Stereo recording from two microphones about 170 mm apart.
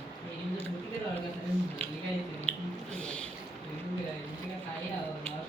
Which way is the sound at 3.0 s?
5° left (ahead or behind).